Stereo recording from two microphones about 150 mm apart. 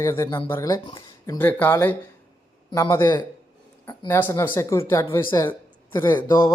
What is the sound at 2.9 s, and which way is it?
Speech, 25° left (ahead or behind).